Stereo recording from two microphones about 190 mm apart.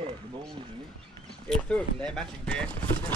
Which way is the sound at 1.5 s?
5° left (ahead or behind).